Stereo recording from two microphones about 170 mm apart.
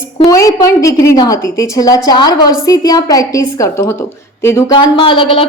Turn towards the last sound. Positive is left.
turn(degrees=30)  # may be behind; listen again after turning